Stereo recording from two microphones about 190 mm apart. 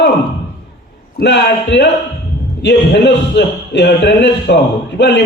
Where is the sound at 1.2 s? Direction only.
65° left (ahead or behind).